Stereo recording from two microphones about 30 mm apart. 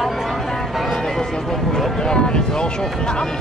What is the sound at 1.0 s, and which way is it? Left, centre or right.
Music, centre.